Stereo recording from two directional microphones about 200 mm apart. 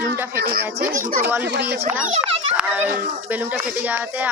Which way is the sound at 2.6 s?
10° right (ahead or behind).